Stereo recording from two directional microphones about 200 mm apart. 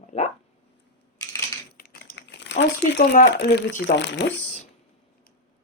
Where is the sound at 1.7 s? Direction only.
50° left (ahead or behind).